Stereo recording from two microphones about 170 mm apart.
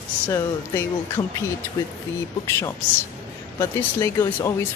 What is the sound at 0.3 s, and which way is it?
Speech, 15° left (ahead or behind).